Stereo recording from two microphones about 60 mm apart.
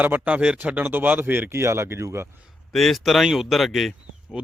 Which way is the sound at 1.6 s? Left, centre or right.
Right.